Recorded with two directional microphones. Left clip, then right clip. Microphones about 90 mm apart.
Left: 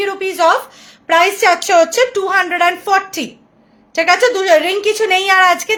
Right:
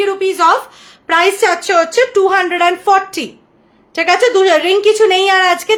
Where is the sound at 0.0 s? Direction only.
35° right (ahead or behind).